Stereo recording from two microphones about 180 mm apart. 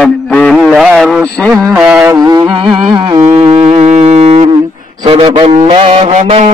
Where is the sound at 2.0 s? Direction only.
20° right (ahead or behind).